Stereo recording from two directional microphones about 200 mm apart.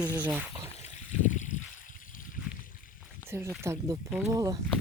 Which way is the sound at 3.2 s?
10° right (ahead or behind).